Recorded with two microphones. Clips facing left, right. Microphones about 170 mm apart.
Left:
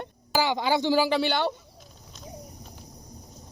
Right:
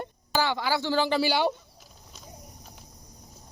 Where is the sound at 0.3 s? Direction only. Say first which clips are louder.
Left 2 dB; 15° left (ahead or behind).